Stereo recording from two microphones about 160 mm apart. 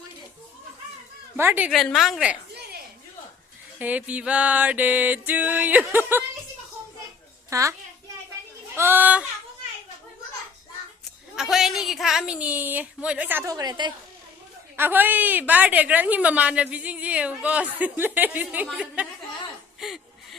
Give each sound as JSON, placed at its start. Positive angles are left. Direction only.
{"t": 1.4, "sound": "a woman's voice", "side_deg": -15}
{"t": 1.7, "sound": "a woman's voice", "side_deg": 0}
{"t": 3.8, "sound": "a woman's voice", "side_deg": -10}
{"t": 7.5, "sound": "a child's voice", "side_deg": -20}
{"t": 11.3, "sound": "a woman's voice", "side_deg": 0}
{"t": 14.8, "sound": "a woman's voice", "side_deg": -10}
{"t": 19.8, "sound": "chuckle", "side_deg": 0}